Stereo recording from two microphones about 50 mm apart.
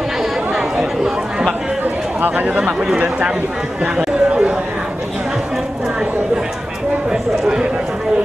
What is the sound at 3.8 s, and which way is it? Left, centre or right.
Chatter, right.